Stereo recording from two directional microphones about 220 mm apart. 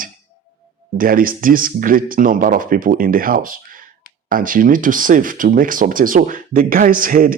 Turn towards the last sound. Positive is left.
turn(degrees=-40)  # may be behind; listen again after turning